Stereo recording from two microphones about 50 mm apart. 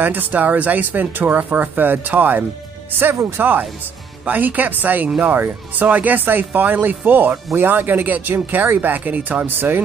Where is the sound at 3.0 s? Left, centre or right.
Right.